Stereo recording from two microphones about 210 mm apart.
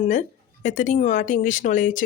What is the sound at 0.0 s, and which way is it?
Speech, 35° left (ahead or behind).